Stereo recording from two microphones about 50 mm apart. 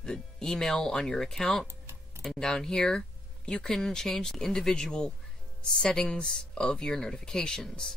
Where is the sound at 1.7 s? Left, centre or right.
Right.